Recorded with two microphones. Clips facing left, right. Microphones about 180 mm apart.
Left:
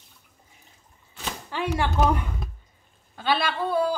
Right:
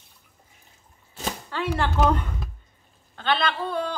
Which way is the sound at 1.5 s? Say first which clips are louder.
Left 1 dB; 15° left (ahead or behind).